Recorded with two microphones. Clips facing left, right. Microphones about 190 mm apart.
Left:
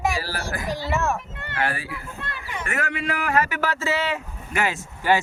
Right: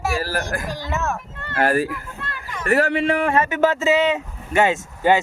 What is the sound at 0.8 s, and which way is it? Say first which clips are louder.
Speech: left 1 dB; 10° left (ahead or behind).